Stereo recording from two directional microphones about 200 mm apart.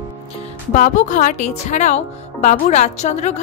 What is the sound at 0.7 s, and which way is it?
A woman's voice, 40° left (ahead or behind).